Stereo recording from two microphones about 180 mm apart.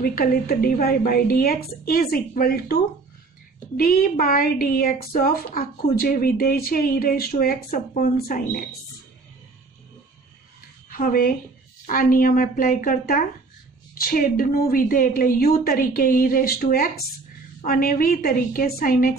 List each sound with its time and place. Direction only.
0.0 s a woman's voice: 55° left (ahead or behind)
10.9 s a woman's voice: 55° left (ahead or behind)